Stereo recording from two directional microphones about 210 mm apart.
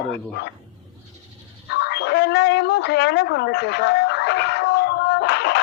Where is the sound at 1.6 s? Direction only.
55° left (ahead or behind).